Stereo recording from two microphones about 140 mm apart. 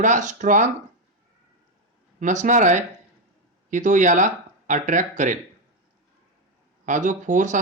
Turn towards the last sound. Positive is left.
turn(degrees=-65)  # may be behind; listen again after turning